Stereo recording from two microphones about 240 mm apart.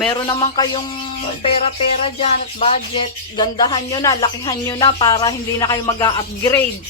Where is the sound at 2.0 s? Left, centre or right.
Left.